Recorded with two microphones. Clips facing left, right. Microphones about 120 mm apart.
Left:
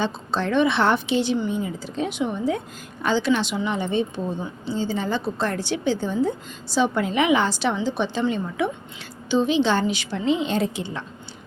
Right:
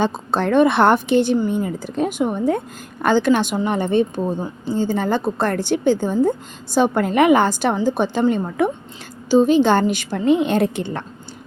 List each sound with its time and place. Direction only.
0.0 s a woman's voice: 50° right (ahead or behind)